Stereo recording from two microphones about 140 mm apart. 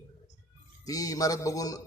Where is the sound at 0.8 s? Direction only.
25° left (ahead or behind).